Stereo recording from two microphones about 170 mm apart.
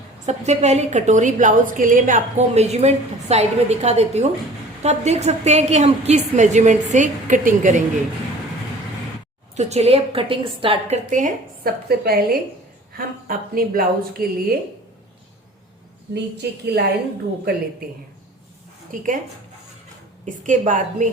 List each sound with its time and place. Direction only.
0.3 s a woman's voice: 40° right (ahead or behind)
9.6 s a woman's voice: 40° right (ahead or behind)
11.1 s a woman's voice: 55° right (ahead or behind)
16.1 s a woman's voice: 75° right (ahead or behind)
20.2 s a woman's voice: 45° right (ahead or behind)